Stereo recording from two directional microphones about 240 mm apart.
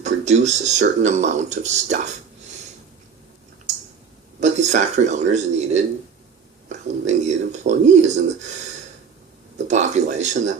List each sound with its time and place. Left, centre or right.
0.0 s speech: right
4.4 s a man's voice: right
7.1 s speech: right
9.6 s speech: right